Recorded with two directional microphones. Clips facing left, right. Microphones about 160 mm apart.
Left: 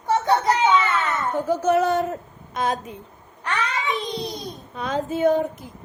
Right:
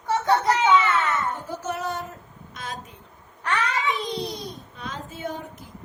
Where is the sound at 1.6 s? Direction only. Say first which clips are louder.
Left 10 dB; 90° left.